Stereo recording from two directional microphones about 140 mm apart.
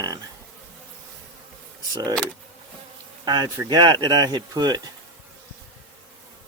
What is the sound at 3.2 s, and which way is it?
Speech, 30° right (ahead or behind).